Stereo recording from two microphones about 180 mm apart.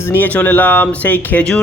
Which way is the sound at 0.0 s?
10° left (ahead or behind).